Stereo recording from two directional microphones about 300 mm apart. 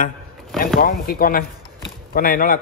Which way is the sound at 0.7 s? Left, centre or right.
Left.